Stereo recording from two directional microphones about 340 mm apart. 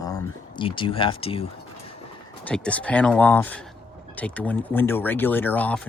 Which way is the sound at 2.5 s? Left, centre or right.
Centre.